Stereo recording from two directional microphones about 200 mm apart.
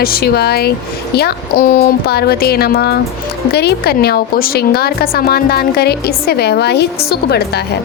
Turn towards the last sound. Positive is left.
turn(degrees=55)  # may be behind; listen again after turning